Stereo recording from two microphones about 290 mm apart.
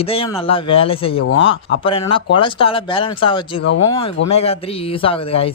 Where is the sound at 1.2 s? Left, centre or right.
Left.